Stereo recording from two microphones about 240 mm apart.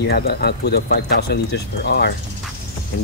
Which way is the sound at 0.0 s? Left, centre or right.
Left.